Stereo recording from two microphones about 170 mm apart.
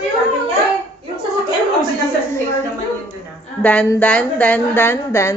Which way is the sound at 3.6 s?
10° left (ahead or behind).